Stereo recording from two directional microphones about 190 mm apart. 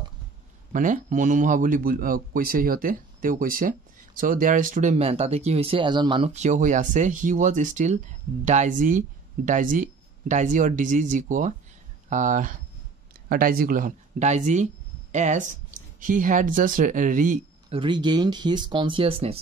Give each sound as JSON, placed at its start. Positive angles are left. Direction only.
{"t": 0.7, "sound": "a man's voice", "side_deg": -45}
{"t": 17.6, "sound": "speech", "side_deg": -25}